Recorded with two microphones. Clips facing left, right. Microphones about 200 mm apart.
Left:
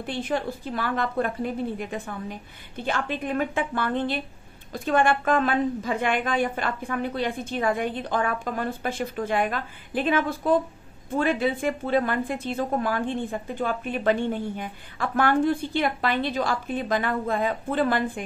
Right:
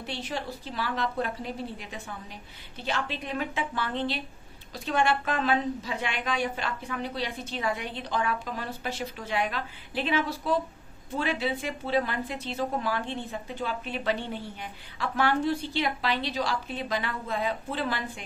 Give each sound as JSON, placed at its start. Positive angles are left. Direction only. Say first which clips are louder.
{"t": 0.0, "sound": "a woman's voice", "louder": "left 7 dB", "side_deg": 50}